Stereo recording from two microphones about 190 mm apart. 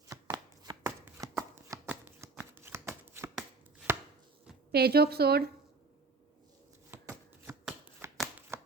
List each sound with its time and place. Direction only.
0.1 s shuffling cards: 20° right (ahead or behind)
3.3 s chopping: 5° right (ahead or behind)
4.7 s a woman's voice: 55° right (ahead or behind)
6.9 s a sound: 10° right (ahead or behind)